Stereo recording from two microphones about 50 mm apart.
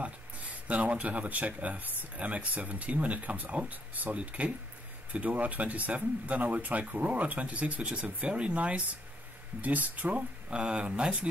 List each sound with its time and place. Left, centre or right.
0.0 s speech: right